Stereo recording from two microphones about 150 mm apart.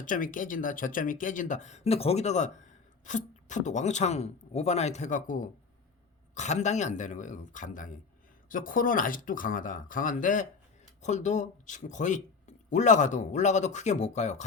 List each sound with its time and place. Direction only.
0.0 s speech: 60° left (ahead or behind)